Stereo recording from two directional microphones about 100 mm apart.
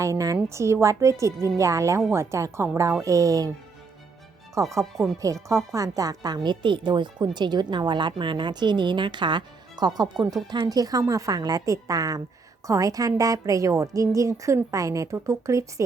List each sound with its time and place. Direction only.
0.0 s a woman's voice: 35° right (ahead or behind)
4.7 s a woman's voice: 30° right (ahead or behind)